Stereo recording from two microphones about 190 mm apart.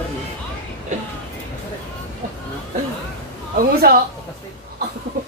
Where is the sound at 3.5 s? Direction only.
50° right (ahead or behind).